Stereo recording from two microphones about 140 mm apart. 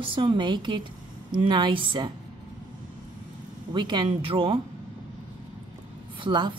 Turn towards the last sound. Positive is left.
turn(degrees=-35)  # may be behind; listen again after turning